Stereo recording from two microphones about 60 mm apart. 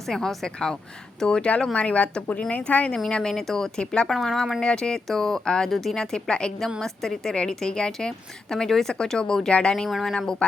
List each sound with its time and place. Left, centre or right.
0.0 s a woman's voice: centre
4.1 s a woman's voice: centre